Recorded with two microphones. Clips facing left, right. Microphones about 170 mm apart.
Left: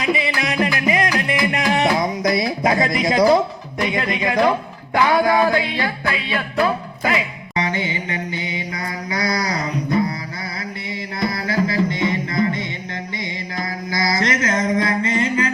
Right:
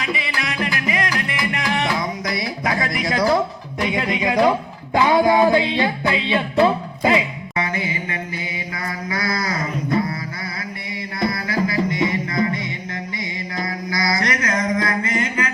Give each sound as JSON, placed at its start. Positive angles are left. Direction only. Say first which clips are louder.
{"t": 0.0, "sound": "music", "louder": "left 5 dB", "side_deg": 20}
{"t": 2.2, "sound": "speech", "louder": "left 6 dB", "side_deg": 25}
{"t": 3.8, "sound": "speech", "louder": "right 1 dB", "side_deg": -10}
{"t": 4.9, "sound": "music", "louder": "right 1 dB", "side_deg": -20}
{"t": 7.5, "sound": "mantra", "louder": "left 2 dB", "side_deg": 25}
{"t": 11.3, "sound": "music", "louder": "left 2 dB", "side_deg": 25}
{"t": 13.9, "sound": "a sound", "louder": "left 2 dB", "side_deg": 25}